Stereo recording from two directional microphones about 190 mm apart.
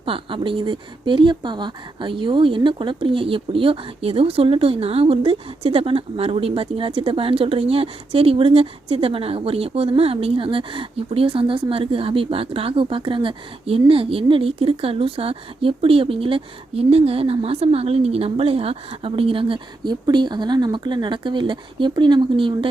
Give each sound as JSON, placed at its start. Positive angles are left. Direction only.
{"t": 0.0, "sound": "speech", "side_deg": -25}